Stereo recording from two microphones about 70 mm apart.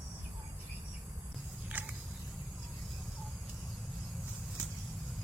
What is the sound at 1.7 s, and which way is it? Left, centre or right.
Mechanisms, right.